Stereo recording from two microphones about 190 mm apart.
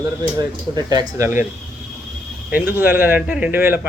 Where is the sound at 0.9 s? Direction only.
20° right (ahead or behind).